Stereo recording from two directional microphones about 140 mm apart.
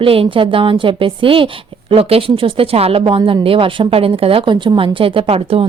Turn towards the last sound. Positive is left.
turn(degrees=-40)  # may be behind; listen again after turning